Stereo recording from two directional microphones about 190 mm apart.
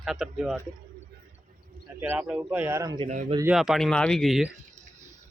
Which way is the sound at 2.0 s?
5° right (ahead or behind).